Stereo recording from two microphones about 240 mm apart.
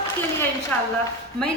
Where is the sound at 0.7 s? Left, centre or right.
Centre.